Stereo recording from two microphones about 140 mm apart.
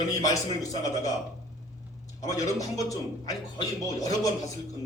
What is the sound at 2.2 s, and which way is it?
Speech, 25° left (ahead or behind).